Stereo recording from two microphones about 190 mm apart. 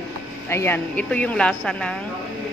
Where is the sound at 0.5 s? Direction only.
10° left (ahead or behind).